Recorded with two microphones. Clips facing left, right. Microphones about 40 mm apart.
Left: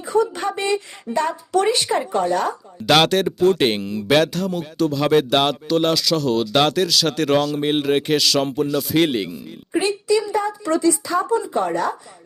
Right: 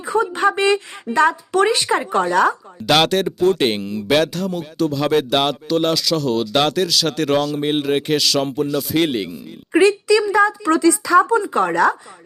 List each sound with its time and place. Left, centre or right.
0.0 s speech: right
2.8 s speech: centre
10.1 s a woman's voice: right